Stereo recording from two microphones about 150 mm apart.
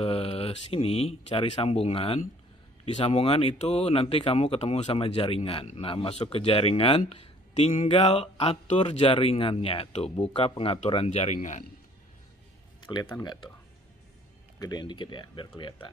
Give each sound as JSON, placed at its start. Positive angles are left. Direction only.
{"t": 0.0, "sound": "a man's voice", "side_deg": 40}
{"t": 12.8, "sound": "speech", "side_deg": 35}
{"t": 14.6, "sound": "speech", "side_deg": 30}